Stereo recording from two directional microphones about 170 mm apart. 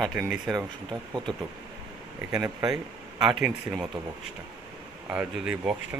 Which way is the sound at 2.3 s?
20° right (ahead or behind).